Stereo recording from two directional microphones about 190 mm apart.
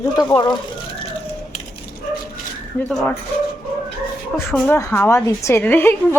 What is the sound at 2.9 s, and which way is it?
Speech, centre (ahead or behind).